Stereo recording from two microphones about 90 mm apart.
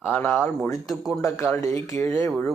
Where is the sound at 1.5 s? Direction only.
35° left (ahead or behind).